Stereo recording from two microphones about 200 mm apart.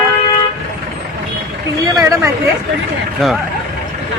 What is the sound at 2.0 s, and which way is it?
Speech, 15° right (ahead or behind).